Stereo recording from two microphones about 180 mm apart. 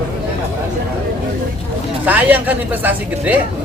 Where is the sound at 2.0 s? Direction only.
10° right (ahead or behind).